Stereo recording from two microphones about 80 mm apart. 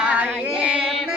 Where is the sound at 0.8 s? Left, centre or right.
Centre.